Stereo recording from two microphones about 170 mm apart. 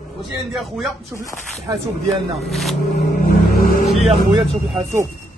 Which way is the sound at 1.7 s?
20° right (ahead or behind).